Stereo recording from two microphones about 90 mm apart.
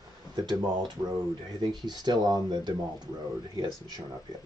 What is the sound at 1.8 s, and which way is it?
Speech, 50° right (ahead or behind).